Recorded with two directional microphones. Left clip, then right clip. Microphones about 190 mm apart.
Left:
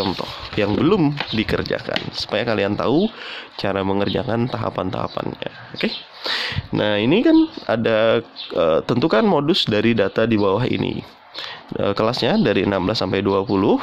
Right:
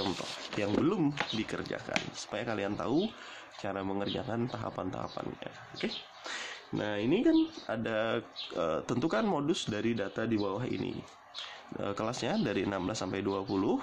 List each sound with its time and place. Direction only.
0.6 s speech: 45° left (ahead or behind)
11.8 s speech: 40° left (ahead or behind)